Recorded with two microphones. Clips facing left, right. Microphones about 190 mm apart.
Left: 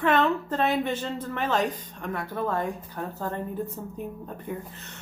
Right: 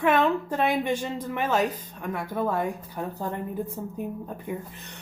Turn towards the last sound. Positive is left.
turn(degrees=-10)  # may be behind; listen again after turning